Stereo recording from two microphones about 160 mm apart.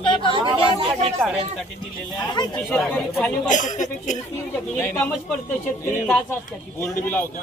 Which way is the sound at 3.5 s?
50° left (ahead or behind).